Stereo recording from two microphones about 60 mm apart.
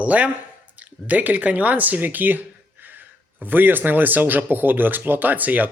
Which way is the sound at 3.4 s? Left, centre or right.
Right.